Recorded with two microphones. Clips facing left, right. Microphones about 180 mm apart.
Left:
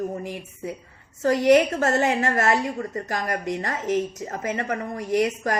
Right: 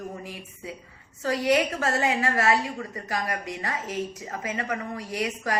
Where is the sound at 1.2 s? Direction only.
50° left (ahead or behind).